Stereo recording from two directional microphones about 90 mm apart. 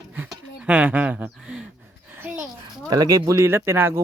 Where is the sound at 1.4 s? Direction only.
10° right (ahead or behind).